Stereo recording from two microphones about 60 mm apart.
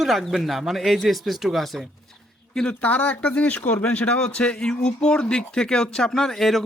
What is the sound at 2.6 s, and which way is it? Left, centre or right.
Speech, left.